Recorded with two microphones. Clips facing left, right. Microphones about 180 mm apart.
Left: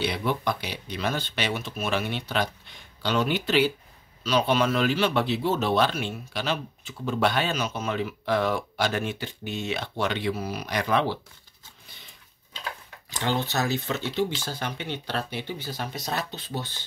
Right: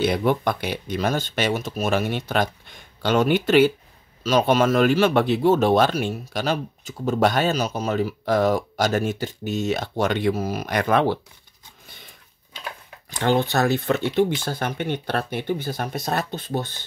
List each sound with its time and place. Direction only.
0.0 s speech: 50° right (ahead or behind)
13.1 s speech: 55° right (ahead or behind)